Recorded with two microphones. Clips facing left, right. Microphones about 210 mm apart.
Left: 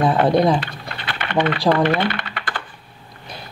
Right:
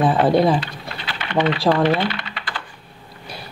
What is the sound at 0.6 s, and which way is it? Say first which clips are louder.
Typing: even; 55° left (ahead or behind).